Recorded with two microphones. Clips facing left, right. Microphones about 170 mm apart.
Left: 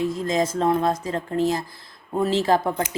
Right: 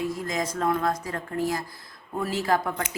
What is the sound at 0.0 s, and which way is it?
Speech, 25° left (ahead or behind).